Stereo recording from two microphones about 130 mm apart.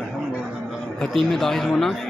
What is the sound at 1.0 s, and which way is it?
Speech, centre (ahead or behind).